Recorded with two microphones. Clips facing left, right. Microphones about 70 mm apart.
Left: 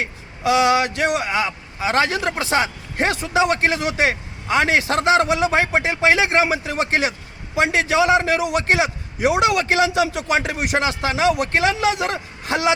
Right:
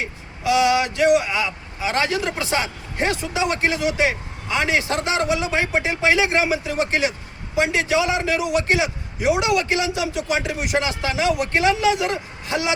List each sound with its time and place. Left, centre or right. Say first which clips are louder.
0.4 s a man's voice: left 1 dB; left